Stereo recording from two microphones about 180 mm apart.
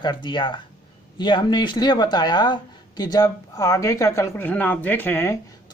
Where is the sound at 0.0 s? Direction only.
25° left (ahead or behind).